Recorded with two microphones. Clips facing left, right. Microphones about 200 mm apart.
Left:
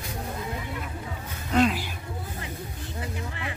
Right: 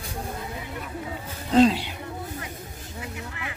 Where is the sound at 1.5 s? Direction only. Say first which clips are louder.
Right 5 dB; 30° right (ahead or behind).